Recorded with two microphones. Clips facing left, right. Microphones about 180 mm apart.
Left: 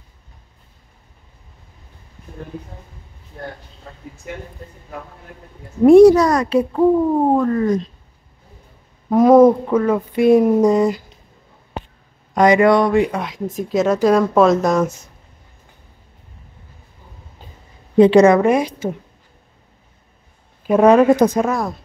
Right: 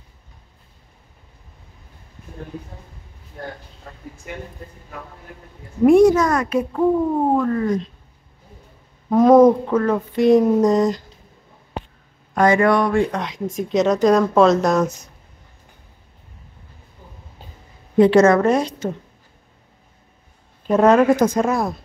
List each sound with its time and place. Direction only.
5.9 s a child's voice: 35° left (ahead or behind)
9.1 s speech: 5° left (ahead or behind)
12.4 s speech: 15° left (ahead or behind)
13.1 s speech: 5° left (ahead or behind)
17.9 s speech: 20° left (ahead or behind)
20.6 s speech: 10° left (ahead or behind)
21.4 s speech: 5° right (ahead or behind)